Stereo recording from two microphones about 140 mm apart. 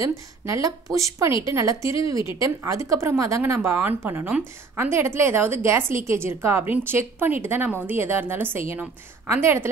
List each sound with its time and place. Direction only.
0.0 s a woman's voice: 20° right (ahead or behind)